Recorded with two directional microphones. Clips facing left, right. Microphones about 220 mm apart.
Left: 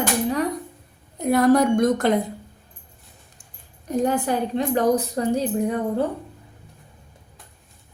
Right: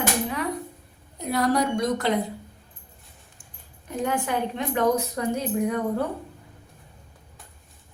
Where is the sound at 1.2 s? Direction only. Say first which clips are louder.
Left 7 dB; 50° left (ahead or behind).